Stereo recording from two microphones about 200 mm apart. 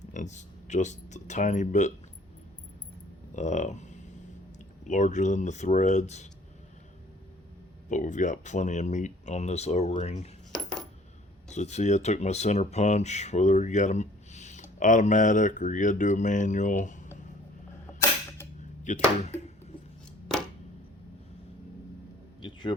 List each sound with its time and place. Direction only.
0.0 s speech: 40° left (ahead or behind)
3.3 s speech: 35° left (ahead or behind)
7.9 s speech: 40° left (ahead or behind)
10.5 s coin: 5° left (ahead or behind)
11.5 s speech: 35° left (ahead or behind)
18.8 s a sound: 35° left (ahead or behind)
22.4 s a sound: 25° left (ahead or behind)